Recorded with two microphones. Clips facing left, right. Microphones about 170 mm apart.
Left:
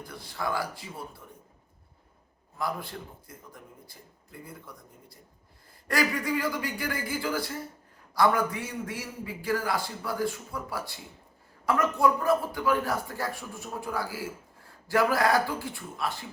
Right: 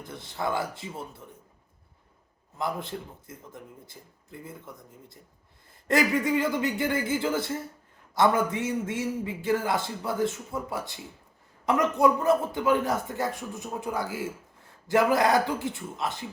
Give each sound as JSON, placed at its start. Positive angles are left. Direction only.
{"t": 0.0, "sound": "a man's voice", "side_deg": -20}
{"t": 2.6, "sound": "a man's voice", "side_deg": -20}